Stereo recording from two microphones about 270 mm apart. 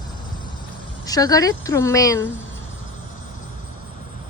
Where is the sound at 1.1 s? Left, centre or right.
Centre.